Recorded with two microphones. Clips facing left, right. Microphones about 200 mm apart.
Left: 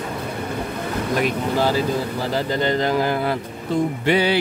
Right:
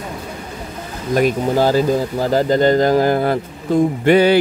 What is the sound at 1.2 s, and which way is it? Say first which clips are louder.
Speech: right 7 dB; 45° right (ahead or behind).